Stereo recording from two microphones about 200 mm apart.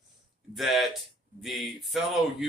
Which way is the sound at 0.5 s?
Centre (ahead or behind).